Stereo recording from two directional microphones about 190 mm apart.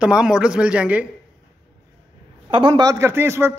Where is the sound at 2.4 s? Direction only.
25° right (ahead or behind).